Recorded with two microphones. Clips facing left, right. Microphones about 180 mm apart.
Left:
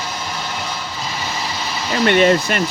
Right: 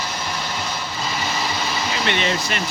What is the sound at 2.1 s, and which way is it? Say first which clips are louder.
Speech: left 11 dB; 50° left (ahead or behind).